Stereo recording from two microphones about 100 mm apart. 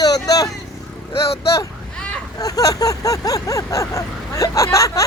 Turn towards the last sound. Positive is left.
turn(degrees=30)  # may be behind; listen again after turning